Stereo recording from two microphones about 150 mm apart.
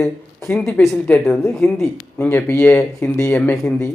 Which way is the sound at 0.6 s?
5° left (ahead or behind).